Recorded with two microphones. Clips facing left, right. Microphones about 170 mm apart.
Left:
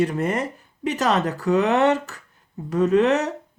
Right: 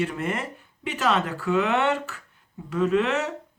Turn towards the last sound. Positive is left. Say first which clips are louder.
# left 5 dB
turn(degrees=40)  # may be behind; listen again after turning